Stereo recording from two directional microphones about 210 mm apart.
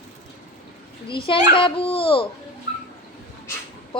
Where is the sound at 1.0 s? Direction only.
25° left (ahead or behind).